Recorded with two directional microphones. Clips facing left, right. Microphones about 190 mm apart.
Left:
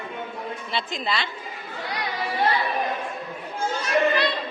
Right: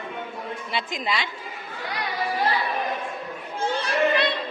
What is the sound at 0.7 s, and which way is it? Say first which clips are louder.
Speech: even; 15° right (ahead or behind).